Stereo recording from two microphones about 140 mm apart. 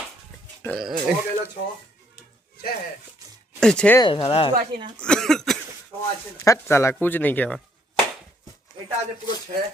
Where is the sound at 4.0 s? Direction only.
40° left (ahead or behind).